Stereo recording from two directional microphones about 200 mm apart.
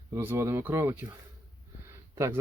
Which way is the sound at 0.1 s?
15° right (ahead or behind).